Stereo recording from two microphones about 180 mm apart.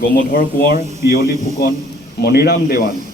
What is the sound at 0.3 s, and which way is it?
A man's voice, 55° left (ahead or behind).